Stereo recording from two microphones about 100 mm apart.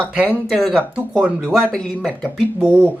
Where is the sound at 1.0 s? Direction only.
10° right (ahead or behind).